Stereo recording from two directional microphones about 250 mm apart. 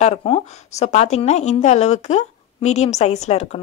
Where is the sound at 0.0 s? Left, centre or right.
Left.